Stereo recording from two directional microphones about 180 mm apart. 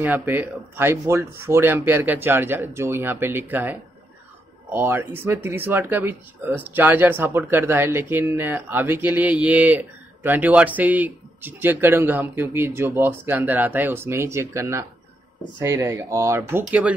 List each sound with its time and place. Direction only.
0.0 s speech: 10° right (ahead or behind)
4.7 s speech: 10° right (ahead or behind)